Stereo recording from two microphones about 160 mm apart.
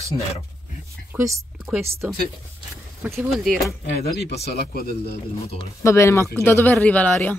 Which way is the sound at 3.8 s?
80° left.